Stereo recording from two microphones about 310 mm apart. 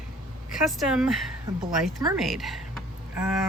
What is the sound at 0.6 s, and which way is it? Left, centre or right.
Speech, centre.